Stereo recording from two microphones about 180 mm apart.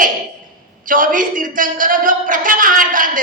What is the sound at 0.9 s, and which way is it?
A woman's voice, 50° right (ahead or behind).